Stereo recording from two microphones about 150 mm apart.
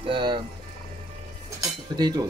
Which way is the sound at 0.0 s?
35° right (ahead or behind).